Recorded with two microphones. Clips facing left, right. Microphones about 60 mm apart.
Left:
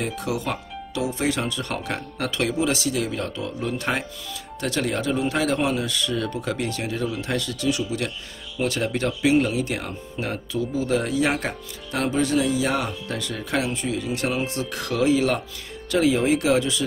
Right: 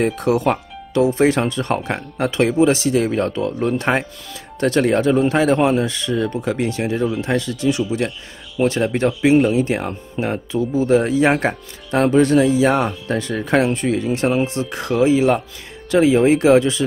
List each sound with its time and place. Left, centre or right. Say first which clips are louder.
0.0 s speech: right 10 dB; right
14.0 s speech: right 7 dB; right